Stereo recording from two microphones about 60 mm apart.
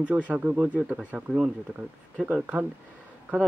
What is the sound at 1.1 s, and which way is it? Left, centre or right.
Speech, centre.